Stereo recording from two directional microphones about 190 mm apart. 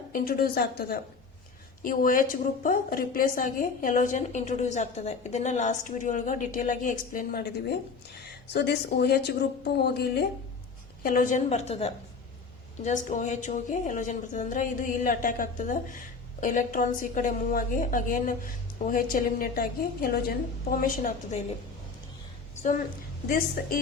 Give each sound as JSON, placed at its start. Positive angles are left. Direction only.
{"t": 0.1, "sound": "a woman's voice", "side_deg": 50}
{"t": 11.0, "sound": "a woman's voice", "side_deg": 45}
{"t": 23.3, "sound": "a woman's voice", "side_deg": 50}